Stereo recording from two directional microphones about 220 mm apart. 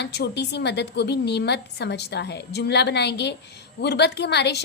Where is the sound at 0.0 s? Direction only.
50° left (ahead or behind).